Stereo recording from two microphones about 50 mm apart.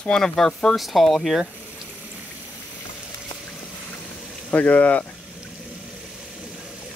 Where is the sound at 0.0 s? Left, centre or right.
Centre.